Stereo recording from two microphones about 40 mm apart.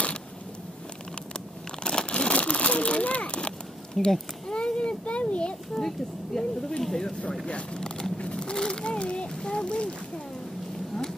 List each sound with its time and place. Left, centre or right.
1.8 s crumpling: left
3.3 s a sound: left
4.0 s speech: centre
4.6 s children playing: left
5.8 s speech: centre
7.4 s speech: left